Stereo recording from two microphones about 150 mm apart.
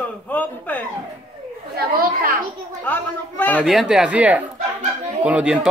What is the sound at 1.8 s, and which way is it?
Speech, 80° right.